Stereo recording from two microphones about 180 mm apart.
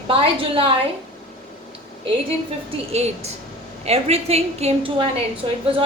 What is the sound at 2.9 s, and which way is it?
A woman's voice, 35° right (ahead or behind).